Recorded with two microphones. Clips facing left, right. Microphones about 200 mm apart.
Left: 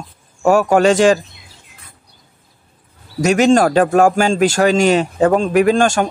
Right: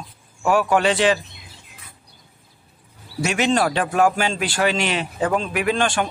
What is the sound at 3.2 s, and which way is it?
A man's voice, 40° left (ahead or behind).